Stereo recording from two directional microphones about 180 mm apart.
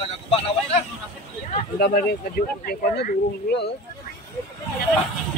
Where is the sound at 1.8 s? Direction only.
55° left (ahead or behind).